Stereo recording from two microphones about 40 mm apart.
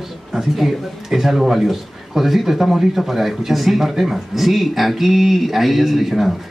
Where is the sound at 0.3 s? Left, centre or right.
Centre.